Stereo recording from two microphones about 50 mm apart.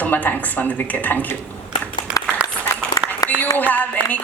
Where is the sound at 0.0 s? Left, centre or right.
Left.